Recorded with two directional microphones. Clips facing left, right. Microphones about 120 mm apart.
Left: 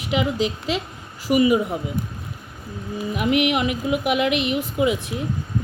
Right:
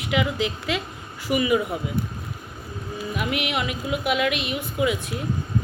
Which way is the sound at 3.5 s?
45° left (ahead or behind).